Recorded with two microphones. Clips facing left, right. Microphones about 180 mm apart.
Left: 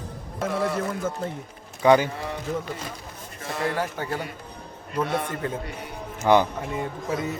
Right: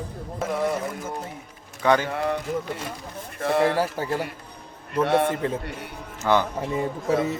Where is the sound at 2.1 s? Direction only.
60° right (ahead or behind).